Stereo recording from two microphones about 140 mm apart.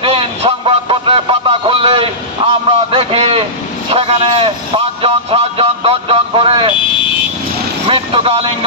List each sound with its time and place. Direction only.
0.0 s music: 40° right (ahead or behind)
2.4 s a sound: 40° right (ahead or behind)
7.8 s vehicle: 40° right (ahead or behind)